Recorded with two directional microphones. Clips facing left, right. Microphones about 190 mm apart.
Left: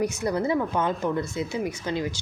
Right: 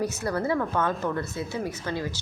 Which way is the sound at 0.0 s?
15° left (ahead or behind).